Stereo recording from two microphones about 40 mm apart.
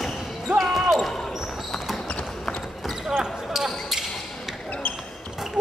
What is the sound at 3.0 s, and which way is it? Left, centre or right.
Basketball bounce, centre.